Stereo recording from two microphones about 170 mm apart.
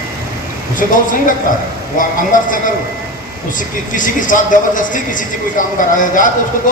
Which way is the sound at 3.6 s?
50° left (ahead or behind).